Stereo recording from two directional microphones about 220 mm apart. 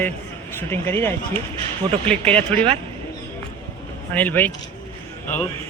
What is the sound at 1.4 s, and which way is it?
Run, 25° right (ahead or behind).